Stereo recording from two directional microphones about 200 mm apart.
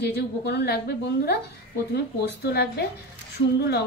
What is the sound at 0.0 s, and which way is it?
A woman's voice, 55° left (ahead or behind).